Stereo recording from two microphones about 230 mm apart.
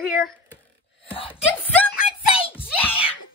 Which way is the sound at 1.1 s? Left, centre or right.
Left.